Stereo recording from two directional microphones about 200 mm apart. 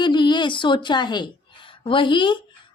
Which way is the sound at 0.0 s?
20° left (ahead or behind).